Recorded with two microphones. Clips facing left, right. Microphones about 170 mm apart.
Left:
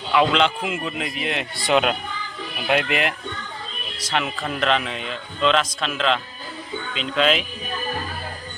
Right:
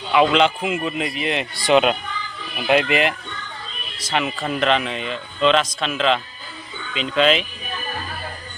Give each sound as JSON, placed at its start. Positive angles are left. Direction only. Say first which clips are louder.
{"t": 0.1, "sound": "a man's voice", "louder": "right 2 dB", "side_deg": -5}